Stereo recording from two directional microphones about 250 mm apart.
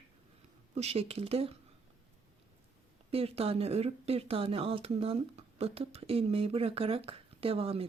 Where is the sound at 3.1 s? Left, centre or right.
Right.